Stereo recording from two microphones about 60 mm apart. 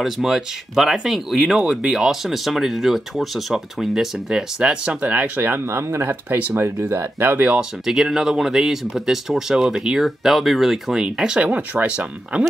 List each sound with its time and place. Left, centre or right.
0.0 s speech: centre; by 5.4 s right
5.4 s speech: right
7.8 s speech: centre
11.5 s speech: right